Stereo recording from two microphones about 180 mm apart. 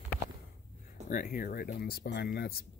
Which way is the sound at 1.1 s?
50° left (ahead or behind).